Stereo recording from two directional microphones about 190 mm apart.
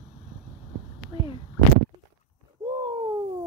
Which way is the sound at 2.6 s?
25° right (ahead or behind).